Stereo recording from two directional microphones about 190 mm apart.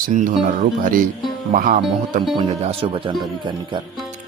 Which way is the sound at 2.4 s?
30° right (ahead or behind).